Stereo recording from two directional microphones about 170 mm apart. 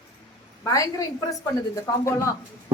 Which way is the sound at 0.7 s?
20° left (ahead or behind).